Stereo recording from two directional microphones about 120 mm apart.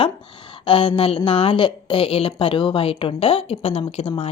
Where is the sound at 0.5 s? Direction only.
45° left (ahead or behind).